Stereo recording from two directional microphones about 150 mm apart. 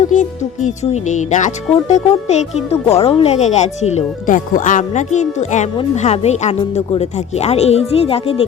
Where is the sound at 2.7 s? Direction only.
20° left (ahead or behind).